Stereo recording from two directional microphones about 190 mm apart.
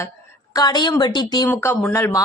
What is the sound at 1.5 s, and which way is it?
Speech, 10° left (ahead or behind).